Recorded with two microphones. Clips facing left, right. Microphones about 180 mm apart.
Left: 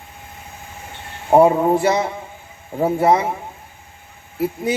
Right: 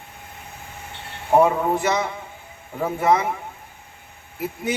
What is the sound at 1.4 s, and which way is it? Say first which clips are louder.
A man's voice: left 5 dB; 35° left (ahead or behind).